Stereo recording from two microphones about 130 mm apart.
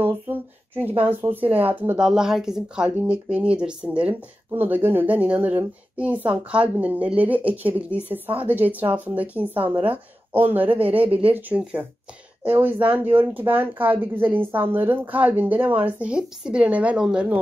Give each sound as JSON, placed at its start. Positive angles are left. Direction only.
{"t": 0.0, "sound": "a sound", "side_deg": -15}
{"t": 1.0, "sound": "speech", "side_deg": -15}
{"t": 10.9, "sound": "speech", "side_deg": -45}
{"t": 11.2, "sound": "speech", "side_deg": -10}